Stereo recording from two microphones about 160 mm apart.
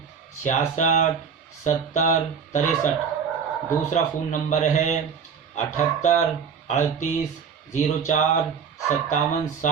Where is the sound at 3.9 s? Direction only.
50° left (ahead or behind).